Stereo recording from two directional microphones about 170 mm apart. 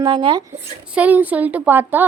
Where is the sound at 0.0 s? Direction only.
25° right (ahead or behind).